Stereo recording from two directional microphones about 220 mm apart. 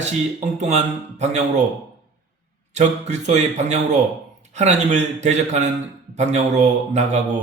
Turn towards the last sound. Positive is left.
turn(degrees=-30)  # may be behind; listen again after turning